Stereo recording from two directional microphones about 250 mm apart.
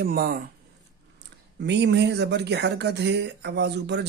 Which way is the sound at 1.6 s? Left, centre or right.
Right.